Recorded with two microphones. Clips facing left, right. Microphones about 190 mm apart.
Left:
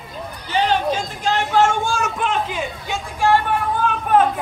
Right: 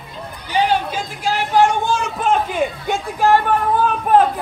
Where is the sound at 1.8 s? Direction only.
25° right (ahead or behind).